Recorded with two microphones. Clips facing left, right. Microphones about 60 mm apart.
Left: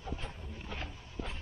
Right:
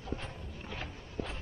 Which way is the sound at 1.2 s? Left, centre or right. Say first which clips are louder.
Right 3 dB; right.